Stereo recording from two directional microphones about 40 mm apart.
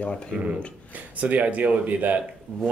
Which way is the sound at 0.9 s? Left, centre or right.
Right.